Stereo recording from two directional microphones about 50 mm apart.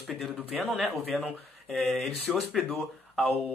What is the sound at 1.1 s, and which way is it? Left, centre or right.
Speech, centre.